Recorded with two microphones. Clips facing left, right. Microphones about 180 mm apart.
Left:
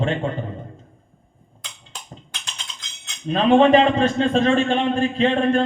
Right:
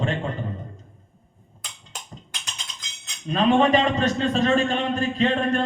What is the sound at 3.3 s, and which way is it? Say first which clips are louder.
A man's voice: left 4 dB; 40° right (ahead or behind).